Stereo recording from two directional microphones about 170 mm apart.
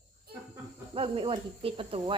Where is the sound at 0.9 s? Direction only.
30° right (ahead or behind).